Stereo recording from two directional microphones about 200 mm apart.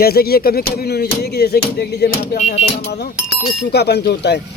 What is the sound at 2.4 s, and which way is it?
Music, 35° left (ahead or behind).